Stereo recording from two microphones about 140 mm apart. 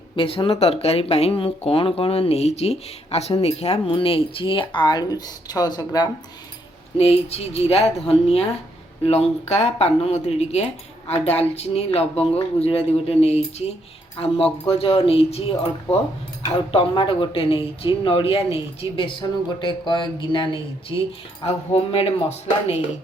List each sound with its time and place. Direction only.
0.2 s speech: 40° left (ahead or behind)
7.0 s speech: 45° left (ahead or behind)
16.7 s speech: 40° left (ahead or behind)
21.4 s speech: 45° left (ahead or behind)